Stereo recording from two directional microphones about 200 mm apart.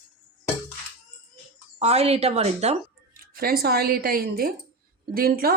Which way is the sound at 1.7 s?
30° right (ahead or behind).